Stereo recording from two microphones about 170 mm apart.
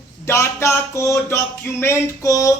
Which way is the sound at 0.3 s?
15° left (ahead or behind).